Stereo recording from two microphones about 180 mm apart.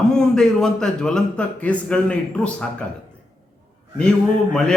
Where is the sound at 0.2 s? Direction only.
5° left (ahead or behind).